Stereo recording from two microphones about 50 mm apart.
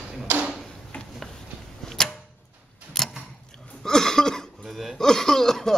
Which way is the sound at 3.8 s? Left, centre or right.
Centre.